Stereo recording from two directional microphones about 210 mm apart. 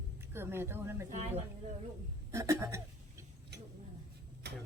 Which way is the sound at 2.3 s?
15° right (ahead or behind).